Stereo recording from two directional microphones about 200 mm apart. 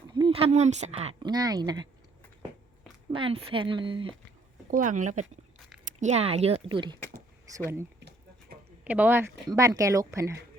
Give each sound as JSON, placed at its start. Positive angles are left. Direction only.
{"t": 0.1, "sound": "speech", "side_deg": -25}
{"t": 3.1, "sound": "speech", "side_deg": -25}
{"t": 4.7, "sound": "speech", "side_deg": -40}
{"t": 8.8, "sound": "speech", "side_deg": -5}